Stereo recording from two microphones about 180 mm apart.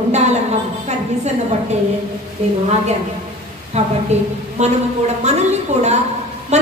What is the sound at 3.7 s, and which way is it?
Speech, 35° right (ahead or behind).